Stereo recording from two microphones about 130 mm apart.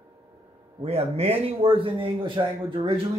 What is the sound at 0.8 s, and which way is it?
Speech, 50° right (ahead or behind).